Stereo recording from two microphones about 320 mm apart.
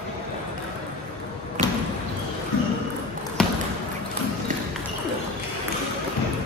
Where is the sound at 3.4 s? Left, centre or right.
Centre.